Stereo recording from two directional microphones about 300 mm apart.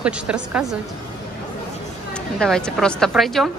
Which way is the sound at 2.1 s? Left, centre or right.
Centre.